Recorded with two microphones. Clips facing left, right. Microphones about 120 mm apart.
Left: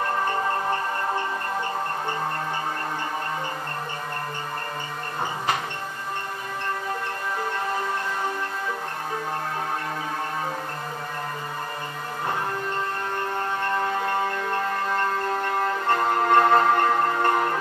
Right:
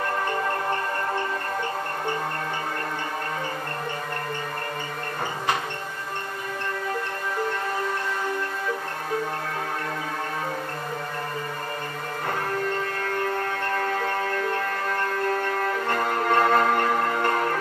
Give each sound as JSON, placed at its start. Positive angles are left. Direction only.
{"t": 13.7, "sound": "music", "side_deg": 20}
{"t": 15.9, "sound": "music", "side_deg": 25}